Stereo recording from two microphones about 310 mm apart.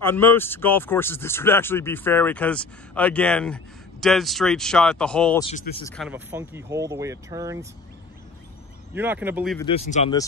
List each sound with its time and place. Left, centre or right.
0.0 s speech: centre
5.4 s speech: centre
5.9 s speech: centre
8.9 s speech: centre
9.6 s speech: centre